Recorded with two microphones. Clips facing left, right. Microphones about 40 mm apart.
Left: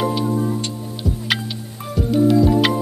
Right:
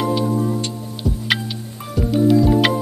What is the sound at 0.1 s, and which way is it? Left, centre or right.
Music, centre.